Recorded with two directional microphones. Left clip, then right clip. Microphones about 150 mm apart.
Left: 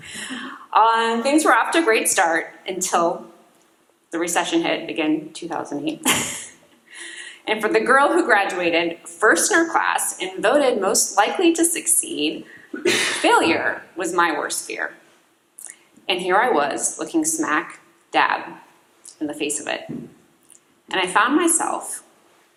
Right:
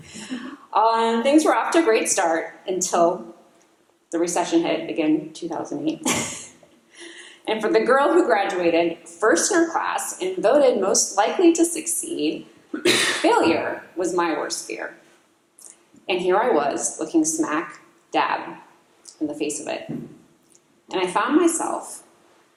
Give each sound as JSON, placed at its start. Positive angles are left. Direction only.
{"t": 0.0, "sound": "a woman's voice", "side_deg": 25}
{"t": 4.1, "sound": "a woman's voice", "side_deg": 20}
{"t": 16.0, "sound": "a woman's voice", "side_deg": 25}
{"t": 19.3, "sound": "a woman's voice", "side_deg": 20}
{"t": 20.8, "sound": "a woman's voice", "side_deg": 25}